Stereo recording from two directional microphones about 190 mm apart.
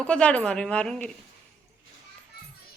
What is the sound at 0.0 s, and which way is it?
A woman's voice, 5° left (ahead or behind).